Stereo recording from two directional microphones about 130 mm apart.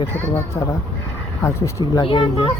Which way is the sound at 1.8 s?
35° left (ahead or behind).